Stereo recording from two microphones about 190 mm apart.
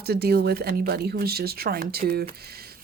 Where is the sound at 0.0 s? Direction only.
55° right (ahead or behind).